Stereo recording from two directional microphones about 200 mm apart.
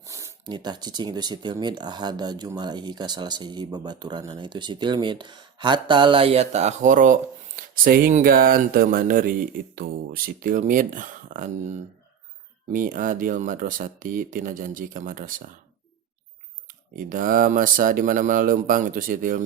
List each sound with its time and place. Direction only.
0.0 s speech: 15° right (ahead or behind); by 15.4 s 45° right (ahead or behind)
16.6 s speech: 40° right (ahead or behind)